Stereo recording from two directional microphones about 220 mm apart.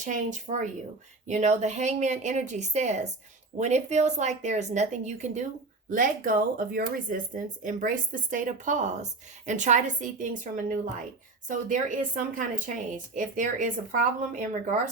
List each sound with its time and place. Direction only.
0.0 s a woman's voice: 35° right (ahead or behind)